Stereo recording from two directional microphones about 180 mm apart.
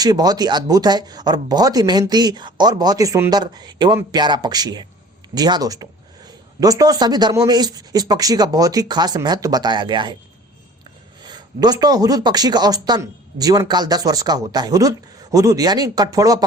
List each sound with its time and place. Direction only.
0.0 s speech: 20° right (ahead or behind)
11.2 s speech: 25° right (ahead or behind)